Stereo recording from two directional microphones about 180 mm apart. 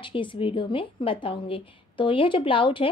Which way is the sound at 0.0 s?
30° left (ahead or behind).